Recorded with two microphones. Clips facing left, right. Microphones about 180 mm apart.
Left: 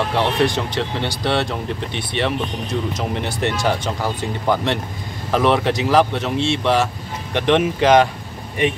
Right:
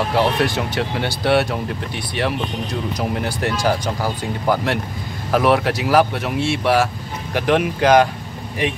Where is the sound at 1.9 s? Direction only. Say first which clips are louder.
Left 1 dB; 5° right (ahead or behind).